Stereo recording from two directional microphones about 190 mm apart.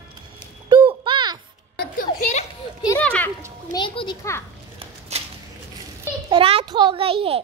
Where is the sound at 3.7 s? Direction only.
25° left (ahead or behind).